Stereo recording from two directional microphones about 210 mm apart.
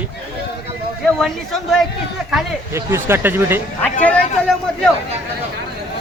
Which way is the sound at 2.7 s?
10° right (ahead or behind).